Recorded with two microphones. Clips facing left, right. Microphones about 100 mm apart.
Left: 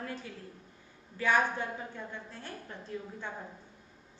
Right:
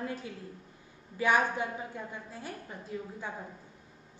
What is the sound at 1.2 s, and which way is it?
A woman's voice, 15° right (ahead or behind).